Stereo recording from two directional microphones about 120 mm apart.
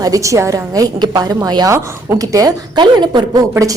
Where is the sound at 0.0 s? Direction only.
30° right (ahead or behind).